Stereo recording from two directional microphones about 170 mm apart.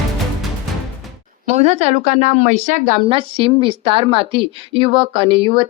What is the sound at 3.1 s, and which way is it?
A woman's voice, 30° right (ahead or behind).